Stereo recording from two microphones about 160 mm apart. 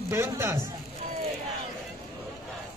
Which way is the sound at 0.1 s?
15° right (ahead or behind).